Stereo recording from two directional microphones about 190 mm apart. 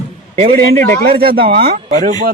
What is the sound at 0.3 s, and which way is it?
A man's voice, 50° right (ahead or behind).